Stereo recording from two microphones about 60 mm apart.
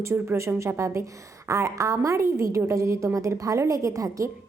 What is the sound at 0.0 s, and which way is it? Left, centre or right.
A woman's voice, right.